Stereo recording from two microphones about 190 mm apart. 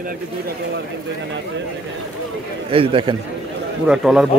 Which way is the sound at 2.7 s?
25° right (ahead or behind).